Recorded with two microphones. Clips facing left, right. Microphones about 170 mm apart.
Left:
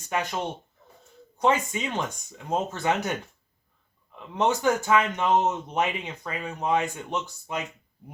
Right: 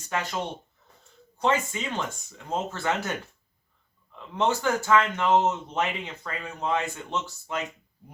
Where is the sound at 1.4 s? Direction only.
15° left (ahead or behind).